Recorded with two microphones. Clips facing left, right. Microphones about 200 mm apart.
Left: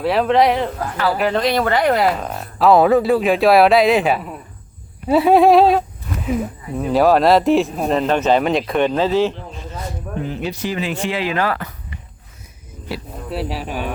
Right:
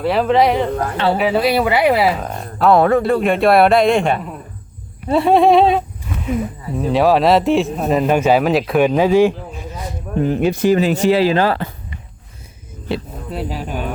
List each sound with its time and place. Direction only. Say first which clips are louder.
0.0 s speech: right 1 dB; centre (ahead or behind)
10.2 s speech: right 11 dB; 50° right (ahead or behind); by 11.7 s 30° right (ahead or behind)
13.3 s speech: even; 5° left (ahead or behind)